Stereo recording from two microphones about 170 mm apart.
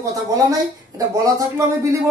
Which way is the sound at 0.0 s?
20° right (ahead or behind).